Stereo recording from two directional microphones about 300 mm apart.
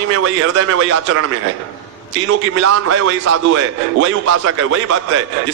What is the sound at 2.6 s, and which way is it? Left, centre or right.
A man's voice, right.